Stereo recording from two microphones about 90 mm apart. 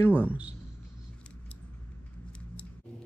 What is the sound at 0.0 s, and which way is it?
Speech, 20° left (ahead or behind).